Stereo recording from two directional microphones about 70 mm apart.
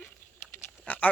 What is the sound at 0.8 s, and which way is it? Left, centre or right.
Pig, left.